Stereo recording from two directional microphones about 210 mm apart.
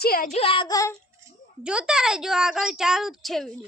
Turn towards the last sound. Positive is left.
turn(degrees=0)  # may be behind; listen again after turning